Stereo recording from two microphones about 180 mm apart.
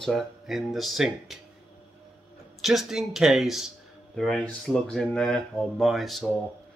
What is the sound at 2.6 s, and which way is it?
Speech, centre (ahead or behind).